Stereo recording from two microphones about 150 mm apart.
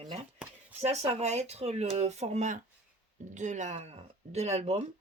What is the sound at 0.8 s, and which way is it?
Speech, 45° right (ahead or behind).